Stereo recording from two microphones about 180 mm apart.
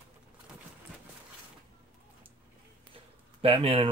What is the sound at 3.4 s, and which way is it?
Speech, 30° right (ahead or behind).